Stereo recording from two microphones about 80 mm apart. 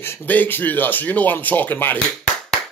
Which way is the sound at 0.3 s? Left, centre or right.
Left.